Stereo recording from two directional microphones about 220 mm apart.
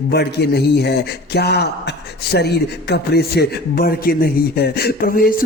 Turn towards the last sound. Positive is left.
turn(degrees=45)  # may be behind; listen again after turning